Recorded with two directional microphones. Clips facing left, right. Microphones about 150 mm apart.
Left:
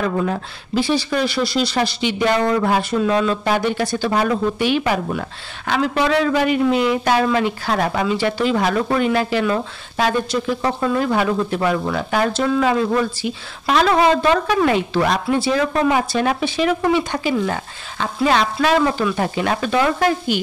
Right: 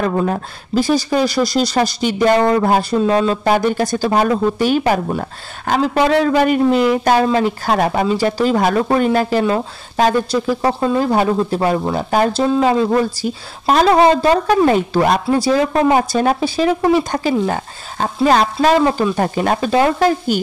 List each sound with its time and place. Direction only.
0.0 s speech: 40° right (ahead or behind)
3.4 s speech: 45° right (ahead or behind)